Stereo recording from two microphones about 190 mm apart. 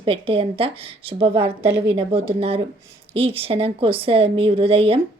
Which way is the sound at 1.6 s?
10° right (ahead or behind).